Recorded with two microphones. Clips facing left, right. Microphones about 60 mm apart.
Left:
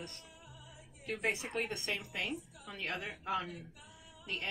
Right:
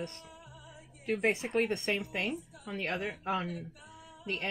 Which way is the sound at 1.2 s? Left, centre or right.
Right.